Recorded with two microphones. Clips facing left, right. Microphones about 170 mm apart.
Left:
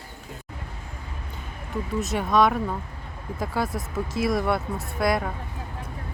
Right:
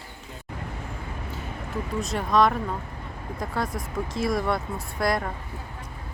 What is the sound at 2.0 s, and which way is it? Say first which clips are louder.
Speech: left 1 dB; centre (ahead or behind).